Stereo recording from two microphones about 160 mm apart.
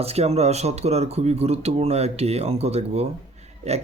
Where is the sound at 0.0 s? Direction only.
40° right (ahead or behind).